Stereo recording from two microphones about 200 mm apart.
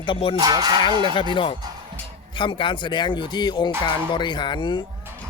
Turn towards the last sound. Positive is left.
turn(degrees=25)  # may be behind; listen again after turning